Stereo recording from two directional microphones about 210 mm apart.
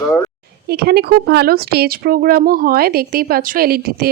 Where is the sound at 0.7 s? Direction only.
50° right (ahead or behind).